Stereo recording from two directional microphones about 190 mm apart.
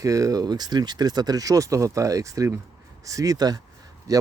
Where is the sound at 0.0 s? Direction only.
15° right (ahead or behind).